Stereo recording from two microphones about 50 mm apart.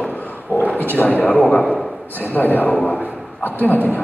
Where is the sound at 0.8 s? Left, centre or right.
Left.